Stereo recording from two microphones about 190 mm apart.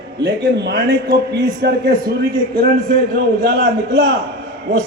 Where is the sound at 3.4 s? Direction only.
65° right (ahead or behind).